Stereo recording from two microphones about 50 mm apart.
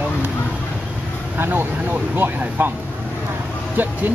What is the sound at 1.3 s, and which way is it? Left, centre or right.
Speech, right.